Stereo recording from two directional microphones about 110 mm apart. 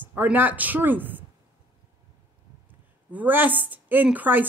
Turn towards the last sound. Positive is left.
turn(degrees=-15)  # may be behind; listen again after turning